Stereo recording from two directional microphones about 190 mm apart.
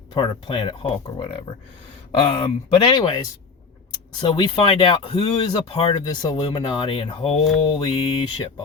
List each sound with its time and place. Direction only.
0.1 s speech: 25° left (ahead or behind)
4.2 s speech: 20° left (ahead or behind)
7.8 s speech: 20° left (ahead or behind)